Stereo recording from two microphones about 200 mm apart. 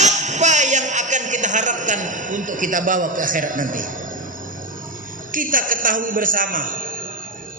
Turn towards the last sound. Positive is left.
turn(degrees=-45)  # may be behind; listen again after turning